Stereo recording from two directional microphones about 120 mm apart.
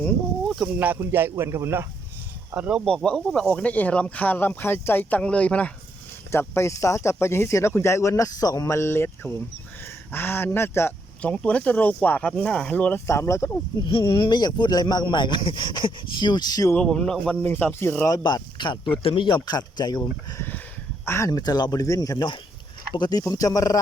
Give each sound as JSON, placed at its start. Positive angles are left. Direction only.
{"t": 0.4, "sound": "a sound", "side_deg": 0}
{"t": 0.8, "sound": "speech", "side_deg": -15}
{"t": 2.6, "sound": "speech", "side_deg": -10}
{"t": 2.8, "sound": "speech", "side_deg": 5}
{"t": 6.5, "sound": "speech", "side_deg": 25}
{"t": 13.1, "sound": "speech", "side_deg": 25}
{"t": 13.8, "sound": "speech", "side_deg": 45}
{"t": 16.7, "sound": "speech", "side_deg": 5}
{"t": 17.4, "sound": "speech", "side_deg": 15}
{"t": 18.0, "sound": "speech", "side_deg": 35}